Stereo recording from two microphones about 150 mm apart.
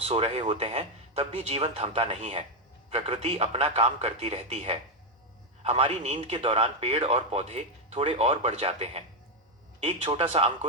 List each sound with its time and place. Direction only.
0.0 s speech: 40° right (ahead or behind)